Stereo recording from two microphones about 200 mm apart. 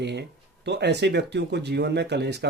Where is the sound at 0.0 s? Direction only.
60° right (ahead or behind).